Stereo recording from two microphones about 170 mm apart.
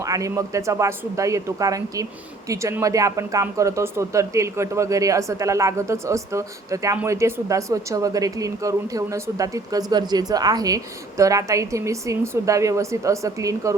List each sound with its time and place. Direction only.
0.0 s speech: 20° right (ahead or behind)